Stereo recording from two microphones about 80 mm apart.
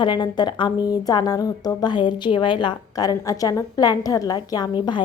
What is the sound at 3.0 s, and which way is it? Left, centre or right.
A woman's voice, left.